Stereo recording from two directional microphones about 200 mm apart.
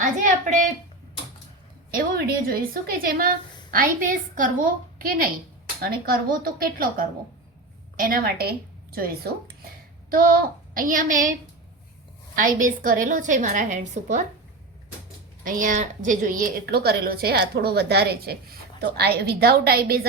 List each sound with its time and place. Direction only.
0.0 s a woman's voice: 40° right (ahead or behind)
2.5 s a woman's voice: 45° right (ahead or behind)
12.4 s a woman's voice: 40° right (ahead or behind)
15.4 s a woman's voice: 45° right (ahead or behind)